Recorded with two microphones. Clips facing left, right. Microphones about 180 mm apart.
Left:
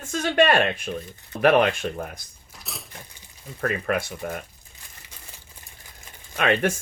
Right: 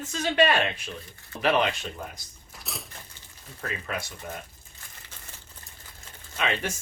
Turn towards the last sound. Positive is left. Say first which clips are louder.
# left 7 dB
turn(degrees=55)  # may be behind; listen again after turning